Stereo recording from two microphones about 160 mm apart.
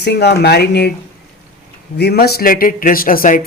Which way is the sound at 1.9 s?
85° left.